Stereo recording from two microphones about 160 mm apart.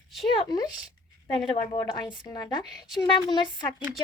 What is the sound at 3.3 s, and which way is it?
Speech, 25° left (ahead or behind).